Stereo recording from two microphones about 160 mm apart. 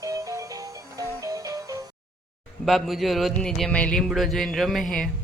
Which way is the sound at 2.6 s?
Centre (ahead or behind).